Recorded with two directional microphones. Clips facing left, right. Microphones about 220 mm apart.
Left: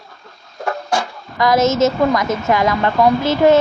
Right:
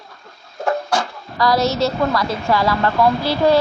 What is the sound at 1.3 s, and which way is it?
A woman's voice, 20° left (ahead or behind).